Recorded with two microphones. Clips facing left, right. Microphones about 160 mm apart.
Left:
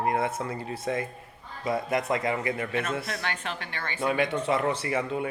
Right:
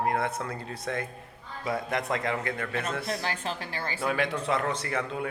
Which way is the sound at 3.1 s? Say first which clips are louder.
Right 2 dB; 30° right (ahead or behind).